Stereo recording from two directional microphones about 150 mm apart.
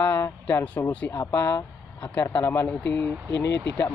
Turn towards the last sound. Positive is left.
turn(degrees=20)  # may be behind; listen again after turning